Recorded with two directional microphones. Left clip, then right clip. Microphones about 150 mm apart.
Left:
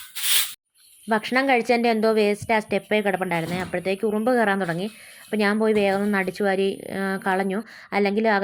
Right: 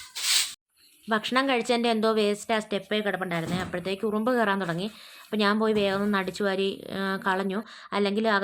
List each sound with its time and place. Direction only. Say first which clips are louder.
1.0 s a woman's voice: left 4 dB; 25° left (ahead or behind)